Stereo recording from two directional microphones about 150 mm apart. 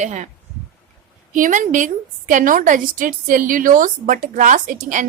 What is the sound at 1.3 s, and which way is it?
A woman's voice, 60° right (ahead or behind).